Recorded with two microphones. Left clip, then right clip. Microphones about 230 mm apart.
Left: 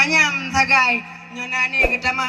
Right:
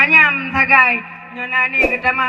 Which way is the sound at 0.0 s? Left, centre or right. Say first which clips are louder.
Right 5 dB; left.